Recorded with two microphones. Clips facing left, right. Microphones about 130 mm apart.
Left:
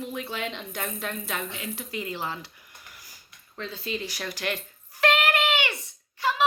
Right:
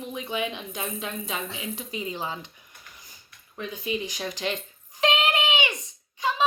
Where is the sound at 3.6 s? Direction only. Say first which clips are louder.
Right 2 dB; 15° right (ahead or behind).